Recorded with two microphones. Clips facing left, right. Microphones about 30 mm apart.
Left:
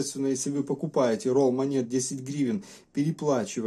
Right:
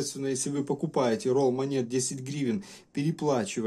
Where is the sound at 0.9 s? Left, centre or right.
Centre.